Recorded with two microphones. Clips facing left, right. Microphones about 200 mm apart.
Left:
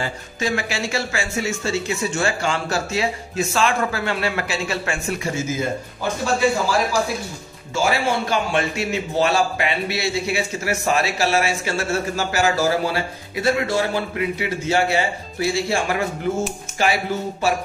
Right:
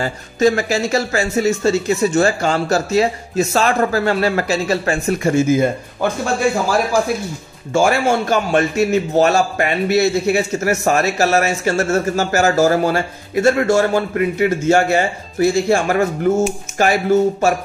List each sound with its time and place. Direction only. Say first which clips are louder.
0.0 s speech: right 10 dB; 40° right (ahead or behind)
5.2 s a man's voice: right 13 dB; 55° right (ahead or behind)
7.7 s a man's voice: right 6 dB; 50° right (ahead or behind)